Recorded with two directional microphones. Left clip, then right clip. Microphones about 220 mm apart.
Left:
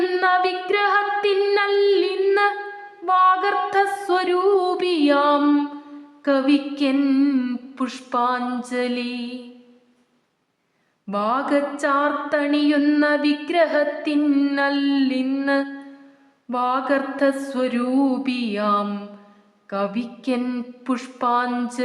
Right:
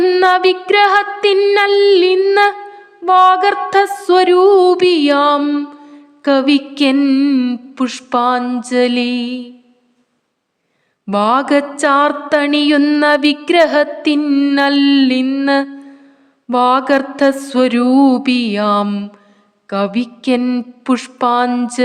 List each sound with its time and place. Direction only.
0.0 s music: 35° right (ahead or behind)
11.0 s music: 40° right (ahead or behind)